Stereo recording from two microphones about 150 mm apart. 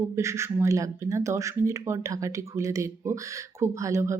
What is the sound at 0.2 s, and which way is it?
Speech, 20° right (ahead or behind).